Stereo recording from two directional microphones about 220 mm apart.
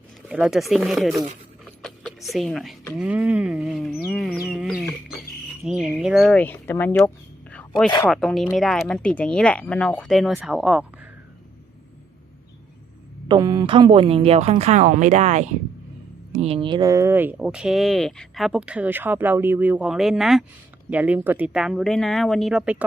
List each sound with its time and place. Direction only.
0.3 s speech: 5° right (ahead or behind)
1.8 s a sound: centre (ahead or behind)
3.0 s speech: 5° right (ahead or behind)
4.1 s chicken: centre (ahead or behind)
5.6 s speech: 5° right (ahead or behind)
8.1 s speech: centre (ahead or behind)
13.2 s a woman's voice: 20° right (ahead or behind); by 22.8 s 5° right (ahead or behind)